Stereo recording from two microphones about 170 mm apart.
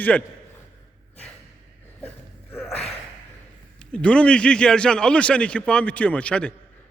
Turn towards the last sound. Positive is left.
turn(degrees=5)  # may be behind; listen again after turning